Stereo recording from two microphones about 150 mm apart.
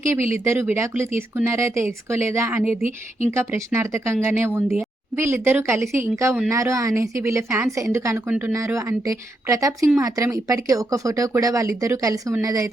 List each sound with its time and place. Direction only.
0.0 s speech: 20° right (ahead or behind)